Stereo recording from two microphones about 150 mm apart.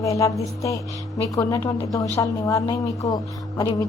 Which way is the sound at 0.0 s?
20° left (ahead or behind).